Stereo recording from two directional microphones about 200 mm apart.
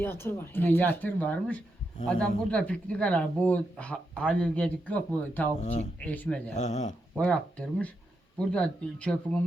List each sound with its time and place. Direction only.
0.0 s speech: 10° left (ahead or behind)
5.5 s speech: 35° left (ahead or behind)
6.1 s speech: 5° left (ahead or behind)
6.5 s speech: 35° left (ahead or behind)
7.2 s speech: 5° left (ahead or behind)